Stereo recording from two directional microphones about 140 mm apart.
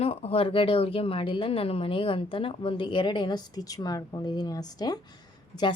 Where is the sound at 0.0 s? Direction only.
45° left (ahead or behind).